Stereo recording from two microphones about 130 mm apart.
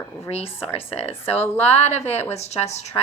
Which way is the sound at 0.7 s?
50° left (ahead or behind).